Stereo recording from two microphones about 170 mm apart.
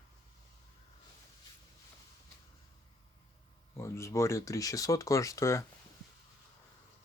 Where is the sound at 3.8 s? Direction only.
15° left (ahead or behind).